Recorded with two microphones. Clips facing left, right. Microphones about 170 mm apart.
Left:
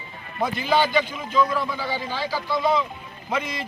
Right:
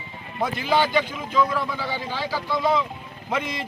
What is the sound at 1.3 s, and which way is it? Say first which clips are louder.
Speech: left 1 dB; 10° right (ahead or behind).